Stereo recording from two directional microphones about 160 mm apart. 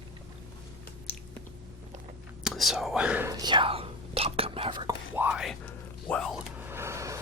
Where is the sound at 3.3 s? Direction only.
25° right (ahead or behind).